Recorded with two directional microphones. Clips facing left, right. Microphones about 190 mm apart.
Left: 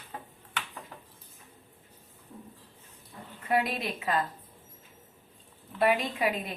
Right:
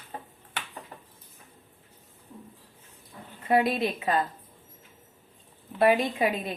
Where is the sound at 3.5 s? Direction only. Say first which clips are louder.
Right 5 dB; 30° right (ahead or behind).